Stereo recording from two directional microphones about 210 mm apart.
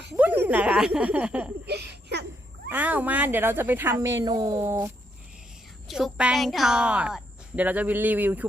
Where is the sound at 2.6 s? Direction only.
10° right (ahead or behind).